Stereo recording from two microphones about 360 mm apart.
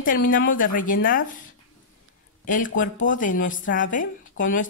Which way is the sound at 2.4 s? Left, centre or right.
Left.